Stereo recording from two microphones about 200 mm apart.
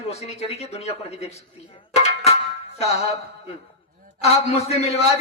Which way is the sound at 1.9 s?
30° left (ahead or behind).